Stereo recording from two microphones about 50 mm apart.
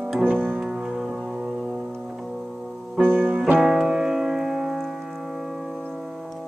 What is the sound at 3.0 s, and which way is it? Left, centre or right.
Music, right.